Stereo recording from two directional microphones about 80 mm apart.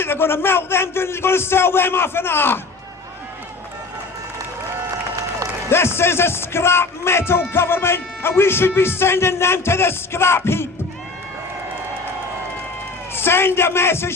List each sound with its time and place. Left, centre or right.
0.0 s a man's voice: left
5.7 s speech: left
13.1 s speech: left